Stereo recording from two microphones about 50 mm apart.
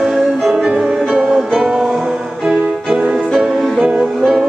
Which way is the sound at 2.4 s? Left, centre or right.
Right.